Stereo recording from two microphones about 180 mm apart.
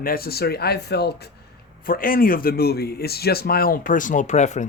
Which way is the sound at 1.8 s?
50° left (ahead or behind).